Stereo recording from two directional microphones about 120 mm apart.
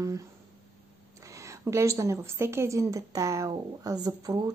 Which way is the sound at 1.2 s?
25° right (ahead or behind).